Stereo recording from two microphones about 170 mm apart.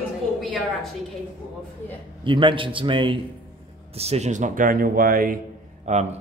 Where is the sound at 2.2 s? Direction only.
30° right (ahead or behind).